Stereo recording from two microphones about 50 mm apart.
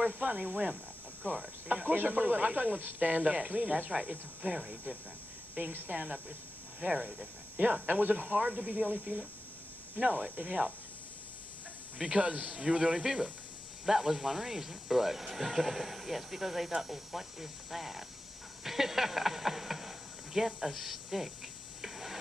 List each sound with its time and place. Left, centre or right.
0.0 s speech: right
3.9 s speech: centre
5.9 s speech: right
12.0 s speech: centre
21.8 s a sound: centre